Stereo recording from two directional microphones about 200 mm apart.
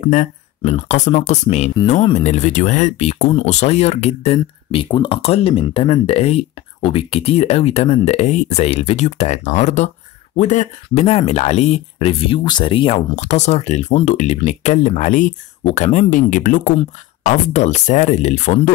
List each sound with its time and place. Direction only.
0.0 s speech: 35° left (ahead or behind)